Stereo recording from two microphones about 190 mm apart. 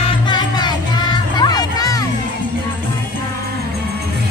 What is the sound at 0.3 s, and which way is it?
Music, 20° left (ahead or behind).